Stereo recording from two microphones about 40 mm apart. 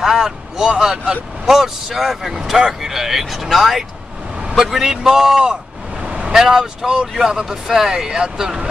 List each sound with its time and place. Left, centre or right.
0.0 s a man's voice: centre
1.4 s speech: centre
5.4 s a sound: right
6.3 s speech: centre